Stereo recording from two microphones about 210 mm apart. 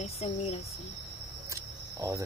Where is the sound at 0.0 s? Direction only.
30° left (ahead or behind).